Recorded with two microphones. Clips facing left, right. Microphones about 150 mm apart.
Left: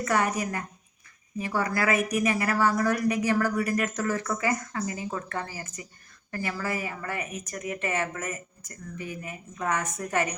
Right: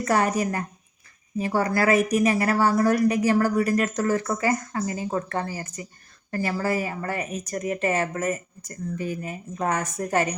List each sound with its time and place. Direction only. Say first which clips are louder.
0.0 s a woman's voice: right 4 dB; 30° right (ahead or behind)